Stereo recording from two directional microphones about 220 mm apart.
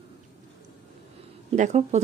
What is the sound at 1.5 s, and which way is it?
Speech, 30° right (ahead or behind).